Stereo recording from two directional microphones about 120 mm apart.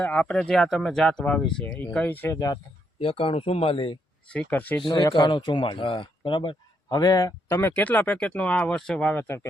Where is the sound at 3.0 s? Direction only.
50° left (ahead or behind).